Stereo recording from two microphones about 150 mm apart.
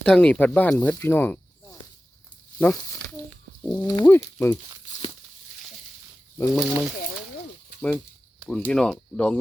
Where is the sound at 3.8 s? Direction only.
15° left (ahead or behind).